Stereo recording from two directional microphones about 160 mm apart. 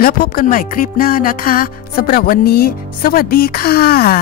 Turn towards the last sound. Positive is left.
turn(degrees=70)  # may be behind; listen again after turning